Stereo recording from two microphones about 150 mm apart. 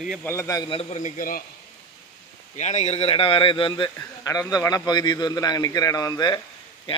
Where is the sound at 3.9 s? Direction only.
20° left (ahead or behind).